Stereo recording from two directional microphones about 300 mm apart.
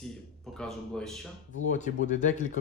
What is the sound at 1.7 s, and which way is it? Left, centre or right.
Speech, left.